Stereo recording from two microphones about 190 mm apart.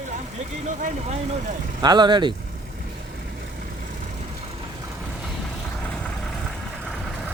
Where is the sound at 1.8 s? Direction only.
20° right (ahead or behind).